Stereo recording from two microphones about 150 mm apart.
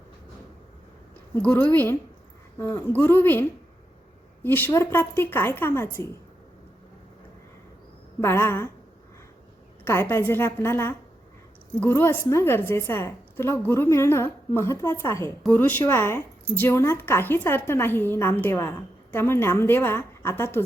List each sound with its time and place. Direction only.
1.4 s a woman's voice: 10° left (ahead or behind)
4.4 s a woman's voice: 15° left (ahead or behind)
8.2 s a woman's voice: 15° left (ahead or behind)
9.8 s a woman's voice: 15° left (ahead or behind)